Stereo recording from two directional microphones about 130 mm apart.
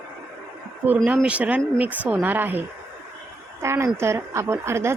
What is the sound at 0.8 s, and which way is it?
A woman's voice, 15° right (ahead or behind).